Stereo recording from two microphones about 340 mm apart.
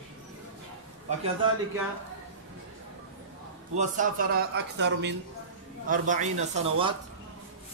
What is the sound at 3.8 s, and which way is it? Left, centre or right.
A man's voice, right.